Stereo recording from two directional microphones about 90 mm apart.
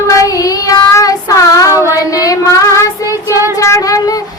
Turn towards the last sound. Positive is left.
turn(degrees=35)  # may be behind; listen again after turning